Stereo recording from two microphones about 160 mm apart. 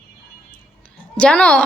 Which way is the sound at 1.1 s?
5° left (ahead or behind).